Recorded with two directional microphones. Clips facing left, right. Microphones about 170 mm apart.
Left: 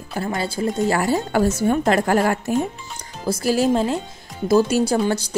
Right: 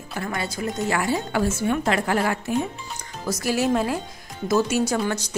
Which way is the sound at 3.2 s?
30° left (ahead or behind).